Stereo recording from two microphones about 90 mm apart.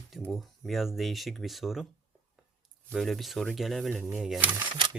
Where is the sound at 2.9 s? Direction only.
Centre (ahead or behind).